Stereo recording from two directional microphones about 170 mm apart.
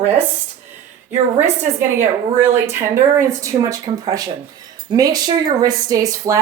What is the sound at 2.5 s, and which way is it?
Speech, 15° right (ahead or behind).